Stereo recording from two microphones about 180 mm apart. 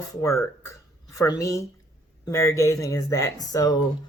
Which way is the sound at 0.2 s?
15° left (ahead or behind).